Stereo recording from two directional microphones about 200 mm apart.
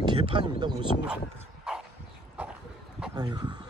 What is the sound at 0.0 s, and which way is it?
Speech, 25° right (ahead or behind).